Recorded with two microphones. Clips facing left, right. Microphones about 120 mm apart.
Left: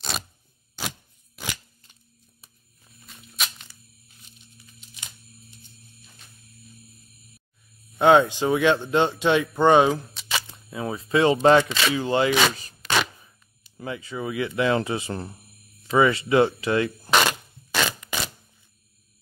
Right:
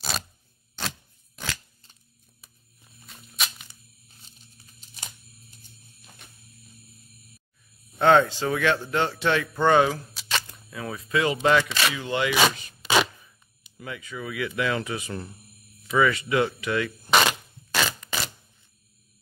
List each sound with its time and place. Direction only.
0.7 s a sound: 10° left (ahead or behind)
3.1 s tearing: centre (ahead or behind)
4.1 s tearing: 35° right (ahead or behind)
6.2 s music: 60° right (ahead or behind)
8.0 s speech: 15° left (ahead or behind)
10.1 s single-lens reflex camera: centre (ahead or behind)
10.5 s speech: 25° left (ahead or behind)
12.8 s a sound: 5° right (ahead or behind)
13.7 s speech: 30° left (ahead or behind)
17.8 s a sound: centre (ahead or behind)